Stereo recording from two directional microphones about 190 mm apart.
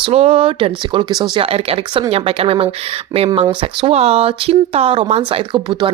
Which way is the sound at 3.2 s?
20° right (ahead or behind).